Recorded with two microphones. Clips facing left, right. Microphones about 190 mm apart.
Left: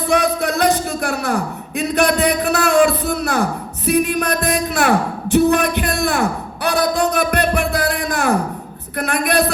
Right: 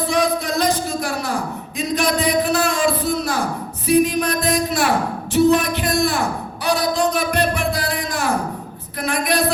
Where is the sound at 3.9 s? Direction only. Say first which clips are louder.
Right 1 dB; 60° left (ahead or behind).